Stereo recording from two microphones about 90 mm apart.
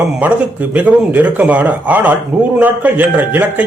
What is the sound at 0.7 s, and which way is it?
A man's voice, 15° right (ahead or behind).